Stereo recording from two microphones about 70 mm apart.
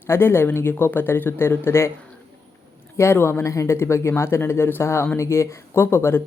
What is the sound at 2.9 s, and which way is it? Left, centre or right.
Speech, left.